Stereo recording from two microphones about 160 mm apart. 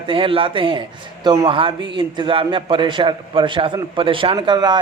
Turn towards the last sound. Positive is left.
turn(degrees=-25)  # may be behind; listen again after turning